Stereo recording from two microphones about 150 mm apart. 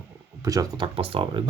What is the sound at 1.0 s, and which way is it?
Speech, 35° right (ahead or behind).